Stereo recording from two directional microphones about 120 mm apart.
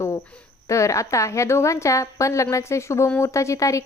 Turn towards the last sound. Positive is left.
turn(degrees=25)  # may be behind; listen again after turning